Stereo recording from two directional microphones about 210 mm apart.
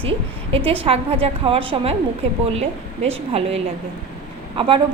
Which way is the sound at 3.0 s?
30° right (ahead or behind).